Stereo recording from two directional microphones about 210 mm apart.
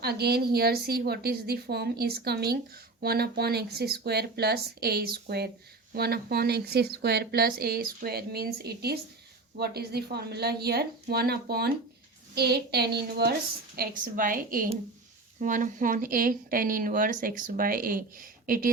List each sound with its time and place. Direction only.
0.0 s a woman's voice: 50° right (ahead or behind)